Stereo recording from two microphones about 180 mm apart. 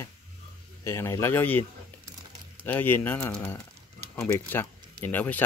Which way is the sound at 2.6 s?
10° left (ahead or behind).